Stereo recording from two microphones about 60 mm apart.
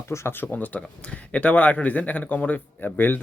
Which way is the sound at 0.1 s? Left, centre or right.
Left.